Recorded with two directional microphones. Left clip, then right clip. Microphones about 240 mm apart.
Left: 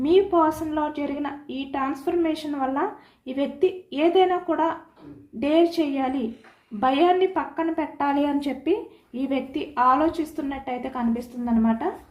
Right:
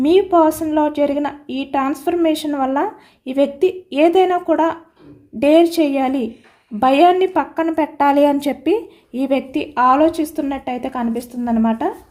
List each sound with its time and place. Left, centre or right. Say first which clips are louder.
0.0 s a woman's voice: right 6 dB; right